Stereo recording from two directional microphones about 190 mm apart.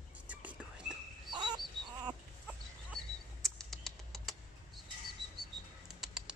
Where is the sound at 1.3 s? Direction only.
20° right (ahead or behind).